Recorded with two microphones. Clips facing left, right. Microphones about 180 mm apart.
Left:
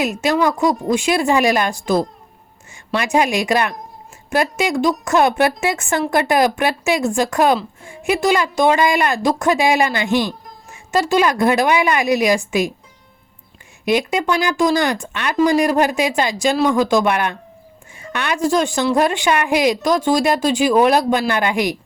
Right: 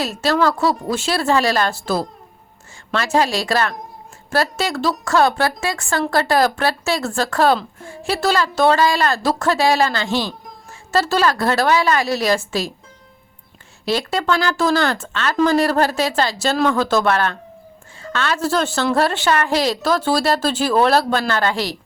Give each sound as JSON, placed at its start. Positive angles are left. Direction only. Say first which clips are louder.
{"t": 0.0, "sound": "a woman's voice", "louder": "left 1 dB", "side_deg": 15}
{"t": 13.8, "sound": "speech", "louder": "left 2 dB", "side_deg": 15}